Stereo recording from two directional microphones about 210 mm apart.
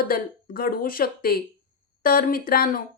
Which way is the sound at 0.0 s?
45° left (ahead or behind).